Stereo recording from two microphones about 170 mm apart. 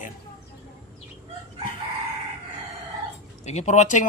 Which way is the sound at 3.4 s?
40° left (ahead or behind).